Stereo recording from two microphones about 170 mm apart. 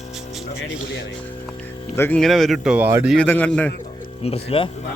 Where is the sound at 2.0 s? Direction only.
10° left (ahead or behind).